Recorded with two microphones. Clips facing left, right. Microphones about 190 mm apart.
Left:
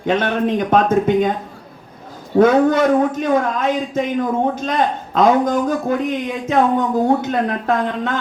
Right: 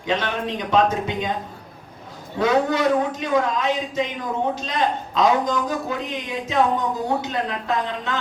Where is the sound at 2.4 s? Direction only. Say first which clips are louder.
Left 7 dB; 50° left (ahead or behind).